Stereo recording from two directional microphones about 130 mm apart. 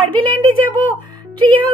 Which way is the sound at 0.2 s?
40° right (ahead or behind).